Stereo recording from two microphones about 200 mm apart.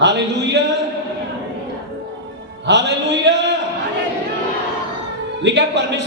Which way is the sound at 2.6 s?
60° right (ahead or behind).